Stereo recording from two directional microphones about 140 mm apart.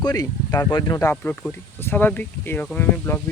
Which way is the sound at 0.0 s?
25° left (ahead or behind).